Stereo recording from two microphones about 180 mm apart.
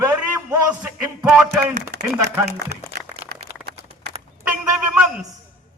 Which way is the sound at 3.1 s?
40° right (ahead or behind).